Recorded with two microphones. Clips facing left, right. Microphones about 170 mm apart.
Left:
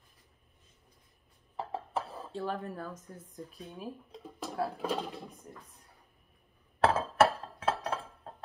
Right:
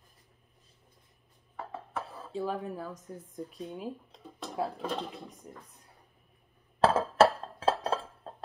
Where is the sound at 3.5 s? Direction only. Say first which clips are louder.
Right 4 dB; 25° right (ahead or behind).